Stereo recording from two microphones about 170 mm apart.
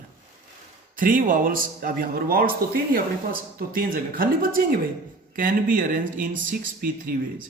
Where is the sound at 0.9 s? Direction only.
55° right (ahead or behind).